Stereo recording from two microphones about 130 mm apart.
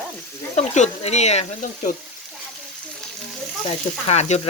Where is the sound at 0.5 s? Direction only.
60° left (ahead or behind).